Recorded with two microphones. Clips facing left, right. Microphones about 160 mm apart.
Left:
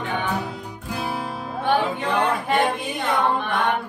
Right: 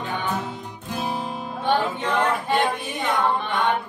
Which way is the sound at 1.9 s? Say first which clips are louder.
Left 1 dB; centre (ahead or behind).